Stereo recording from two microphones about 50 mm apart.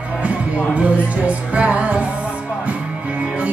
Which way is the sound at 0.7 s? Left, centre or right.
Right.